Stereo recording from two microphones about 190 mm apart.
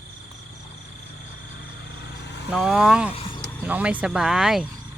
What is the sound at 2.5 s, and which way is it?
Speech, centre (ahead or behind).